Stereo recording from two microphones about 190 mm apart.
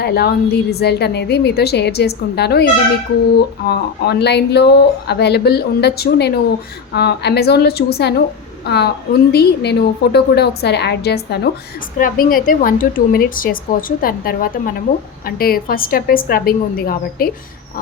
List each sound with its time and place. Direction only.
0.0 s speech: 55° left (ahead or behind)
11.9 s a woman's voice: 45° left (ahead or behind)